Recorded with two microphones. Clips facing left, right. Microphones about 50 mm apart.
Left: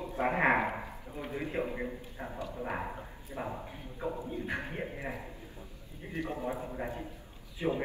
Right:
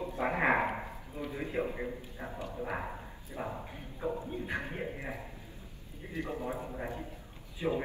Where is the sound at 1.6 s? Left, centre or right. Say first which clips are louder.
Even; centre.